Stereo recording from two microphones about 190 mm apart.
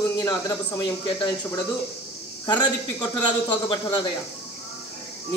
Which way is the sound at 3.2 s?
25° left (ahead or behind).